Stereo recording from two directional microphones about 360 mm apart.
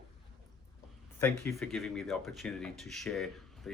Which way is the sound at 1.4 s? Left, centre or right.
Centre.